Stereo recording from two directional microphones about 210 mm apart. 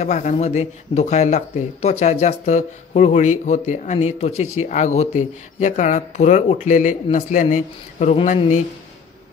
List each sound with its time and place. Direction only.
0.0 s speech: 35° left (ahead or behind)